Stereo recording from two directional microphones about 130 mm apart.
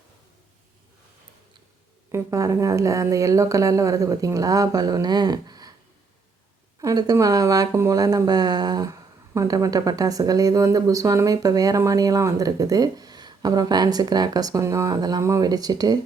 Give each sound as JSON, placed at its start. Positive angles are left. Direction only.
{"t": 2.1, "sound": "speech", "side_deg": -25}
{"t": 6.8, "sound": "speech", "side_deg": -25}